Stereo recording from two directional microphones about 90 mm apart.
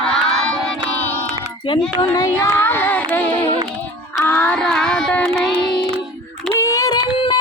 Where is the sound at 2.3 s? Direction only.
25° left (ahead or behind).